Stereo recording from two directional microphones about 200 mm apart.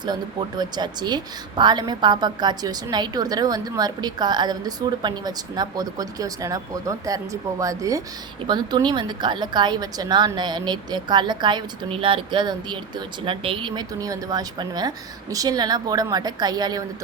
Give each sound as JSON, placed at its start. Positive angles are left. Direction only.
{"t": 0.0, "sound": "a woman's voice", "side_deg": -20}